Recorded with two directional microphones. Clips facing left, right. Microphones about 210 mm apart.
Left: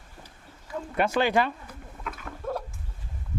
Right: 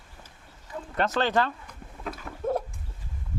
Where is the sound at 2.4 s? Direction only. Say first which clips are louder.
Right 5 dB; 20° right (ahead or behind).